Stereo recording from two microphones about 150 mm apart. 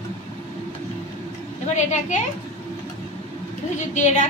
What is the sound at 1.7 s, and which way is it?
Speech, 50° left (ahead or behind).